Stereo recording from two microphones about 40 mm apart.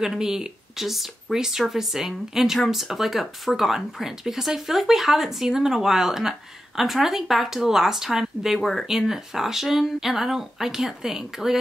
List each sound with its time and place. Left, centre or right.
0.0 s speech: centre